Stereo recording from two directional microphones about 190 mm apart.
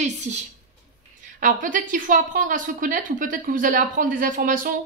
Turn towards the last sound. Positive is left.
turn(degrees=-45)  # may be behind; listen again after turning